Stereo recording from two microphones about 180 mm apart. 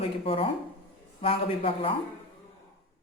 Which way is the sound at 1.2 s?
30° left (ahead or behind).